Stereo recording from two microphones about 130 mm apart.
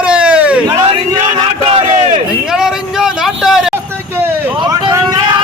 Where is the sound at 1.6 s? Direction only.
45° right (ahead or behind).